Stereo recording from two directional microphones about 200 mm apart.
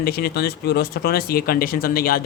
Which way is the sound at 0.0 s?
50° left (ahead or behind).